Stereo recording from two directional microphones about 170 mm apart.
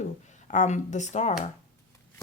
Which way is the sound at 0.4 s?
45° left (ahead or behind).